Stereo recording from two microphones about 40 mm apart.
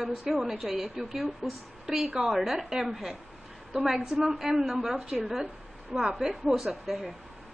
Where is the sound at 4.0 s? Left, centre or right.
Centre.